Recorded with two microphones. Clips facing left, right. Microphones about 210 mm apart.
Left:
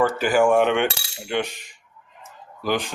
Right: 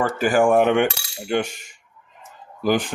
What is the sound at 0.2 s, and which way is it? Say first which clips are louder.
Speech: right 4 dB; 50° right (ahead or behind).